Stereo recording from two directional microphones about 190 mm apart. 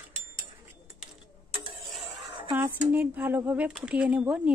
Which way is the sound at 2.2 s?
25° right (ahead or behind).